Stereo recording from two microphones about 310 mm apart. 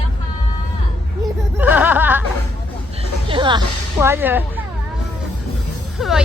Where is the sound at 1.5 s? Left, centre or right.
Centre.